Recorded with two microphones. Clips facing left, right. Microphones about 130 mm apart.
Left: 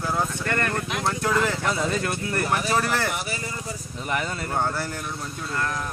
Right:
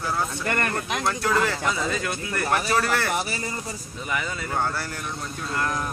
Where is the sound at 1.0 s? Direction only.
25° left (ahead or behind).